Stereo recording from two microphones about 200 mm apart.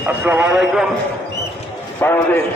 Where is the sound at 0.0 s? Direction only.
5° right (ahead or behind).